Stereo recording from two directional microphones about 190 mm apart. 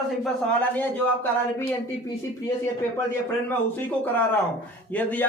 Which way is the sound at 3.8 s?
10° left (ahead or behind).